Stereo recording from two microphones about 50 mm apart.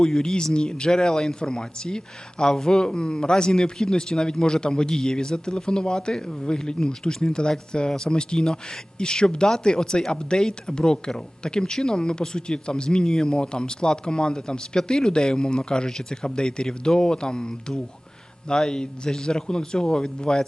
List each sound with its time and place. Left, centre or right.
0.0 s speech: centre